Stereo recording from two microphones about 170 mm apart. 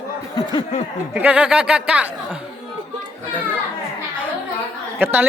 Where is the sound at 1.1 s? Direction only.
10° right (ahead or behind).